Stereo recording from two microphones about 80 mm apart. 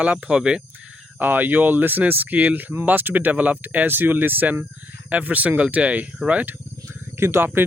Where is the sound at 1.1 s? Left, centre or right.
Right.